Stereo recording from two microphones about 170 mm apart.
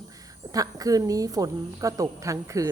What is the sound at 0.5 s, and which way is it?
A woman's voice, 20° right (ahead or behind).